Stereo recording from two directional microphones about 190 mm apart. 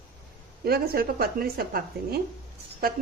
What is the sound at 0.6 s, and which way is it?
A woman's voice, 55° right (ahead or behind).